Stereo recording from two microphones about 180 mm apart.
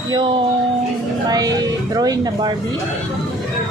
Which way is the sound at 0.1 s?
25° right (ahead or behind).